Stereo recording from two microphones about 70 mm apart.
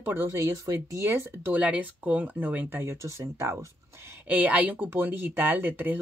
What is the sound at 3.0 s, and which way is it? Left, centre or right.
Speech, right.